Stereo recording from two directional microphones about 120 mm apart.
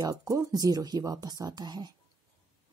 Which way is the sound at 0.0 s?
30° right (ahead or behind).